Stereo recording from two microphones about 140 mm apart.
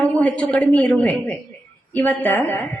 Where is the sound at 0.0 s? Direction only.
10° left (ahead or behind).